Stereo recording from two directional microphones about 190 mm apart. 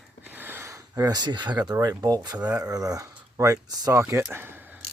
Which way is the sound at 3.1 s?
15° right (ahead or behind).